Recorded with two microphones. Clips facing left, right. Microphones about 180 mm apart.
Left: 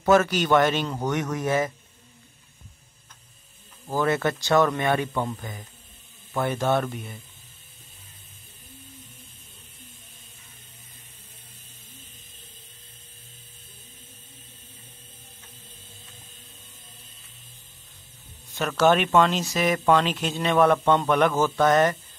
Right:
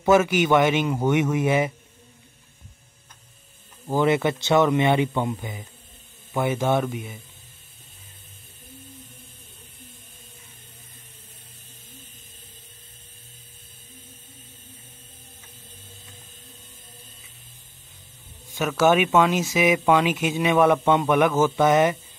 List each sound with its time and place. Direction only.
0.0 s a man's voice: 10° right (ahead or behind)
3.8 s a man's voice: 15° right (ahead or behind)
6.9 s speech: centre (ahead or behind)
18.5 s a man's voice: 5° right (ahead or behind)